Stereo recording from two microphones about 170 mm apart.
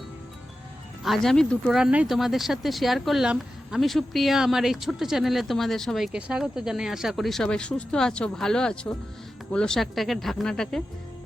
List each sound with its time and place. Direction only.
1.0 s speech: centre (ahead or behind)